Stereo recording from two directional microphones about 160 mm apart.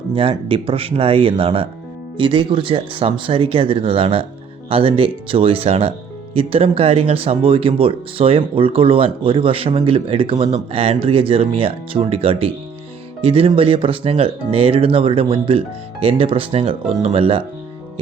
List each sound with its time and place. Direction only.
0.1 s speech: 35° right (ahead or behind)